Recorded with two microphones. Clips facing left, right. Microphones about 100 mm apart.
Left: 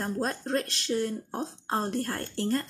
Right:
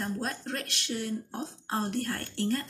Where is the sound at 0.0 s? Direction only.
35° left (ahead or behind).